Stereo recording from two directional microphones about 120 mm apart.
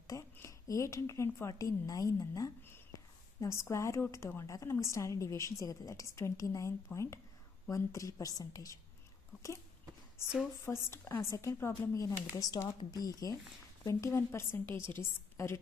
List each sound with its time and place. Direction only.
0.0 s speech: 25° left (ahead or behind)
10.6 s speech: 20° left (ahead or behind)